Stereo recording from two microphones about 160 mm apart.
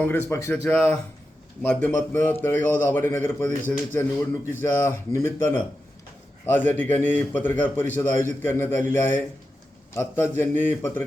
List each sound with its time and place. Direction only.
0.0 s a man's voice: 15° left (ahead or behind)